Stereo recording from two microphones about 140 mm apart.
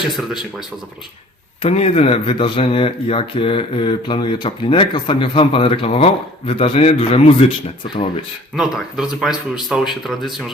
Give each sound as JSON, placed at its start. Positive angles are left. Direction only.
{"t": 1.6, "sound": "speech", "side_deg": 45}
{"t": 8.5, "sound": "speech", "side_deg": 0}